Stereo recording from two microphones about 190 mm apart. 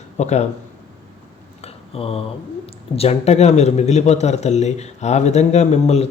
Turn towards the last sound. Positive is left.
turn(degrees=35)  # may be behind; listen again after turning